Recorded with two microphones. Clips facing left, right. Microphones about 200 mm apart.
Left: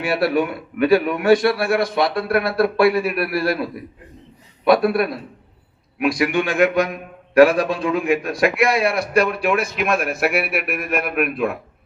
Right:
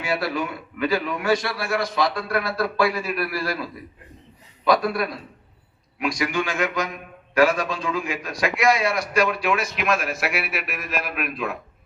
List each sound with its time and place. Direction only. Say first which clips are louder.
0.0 s a man's voice: left 6 dB; 60° left (ahead or behind)